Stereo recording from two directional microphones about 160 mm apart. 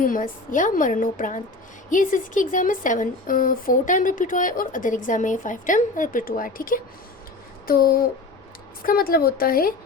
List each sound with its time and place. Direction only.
0.0 s speech: 55° left (ahead or behind)
7.7 s a sound: 70° left (ahead or behind)
8.8 s speech: 65° left (ahead or behind)